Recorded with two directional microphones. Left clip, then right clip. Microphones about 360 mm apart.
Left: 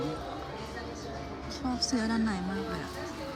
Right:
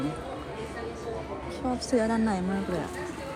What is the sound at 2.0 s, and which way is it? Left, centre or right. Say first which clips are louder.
Speech: right 5 dB; centre.